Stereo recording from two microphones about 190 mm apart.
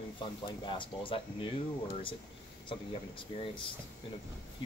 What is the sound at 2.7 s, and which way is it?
Speech, 25° left (ahead or behind).